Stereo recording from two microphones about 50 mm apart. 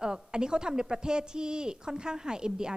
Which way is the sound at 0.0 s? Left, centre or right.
Centre.